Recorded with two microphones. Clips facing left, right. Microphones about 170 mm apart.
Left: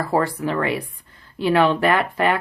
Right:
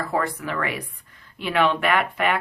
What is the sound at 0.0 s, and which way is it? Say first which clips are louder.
Speech: left 5 dB; 30° left (ahead or behind).